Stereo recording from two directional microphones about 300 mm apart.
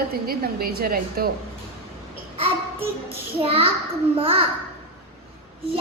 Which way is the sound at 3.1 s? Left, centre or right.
Centre.